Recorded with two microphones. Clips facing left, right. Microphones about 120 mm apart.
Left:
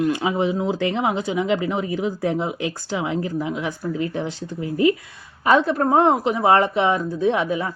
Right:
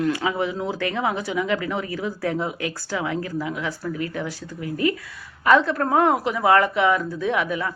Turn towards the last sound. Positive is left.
turn(degrees=25)  # may be behind; listen again after turning